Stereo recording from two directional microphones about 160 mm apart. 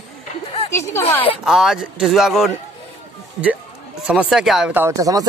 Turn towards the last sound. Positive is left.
turn(degrees=-20)  # may be behind; listen again after turning